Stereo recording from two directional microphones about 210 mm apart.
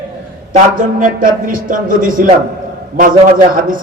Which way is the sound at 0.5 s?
40° right (ahead or behind).